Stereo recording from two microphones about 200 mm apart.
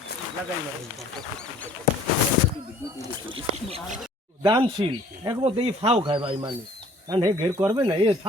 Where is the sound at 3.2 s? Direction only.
25° right (ahead or behind).